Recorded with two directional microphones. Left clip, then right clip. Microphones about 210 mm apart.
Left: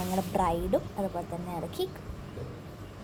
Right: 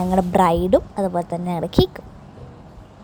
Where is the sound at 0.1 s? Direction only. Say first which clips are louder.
Right 12 dB; 40° right (ahead or behind).